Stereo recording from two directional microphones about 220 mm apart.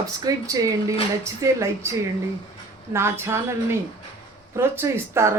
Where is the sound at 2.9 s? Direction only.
10° right (ahead or behind).